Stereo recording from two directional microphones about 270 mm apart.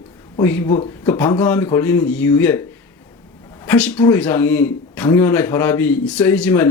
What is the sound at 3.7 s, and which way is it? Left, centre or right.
A man's voice, centre.